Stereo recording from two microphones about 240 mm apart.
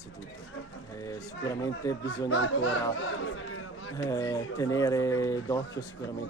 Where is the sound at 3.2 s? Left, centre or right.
Left.